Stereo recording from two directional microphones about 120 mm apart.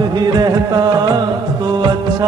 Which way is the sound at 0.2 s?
35° right (ahead or behind).